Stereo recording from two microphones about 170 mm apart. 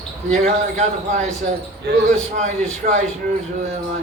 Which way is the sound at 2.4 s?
45° right (ahead or behind).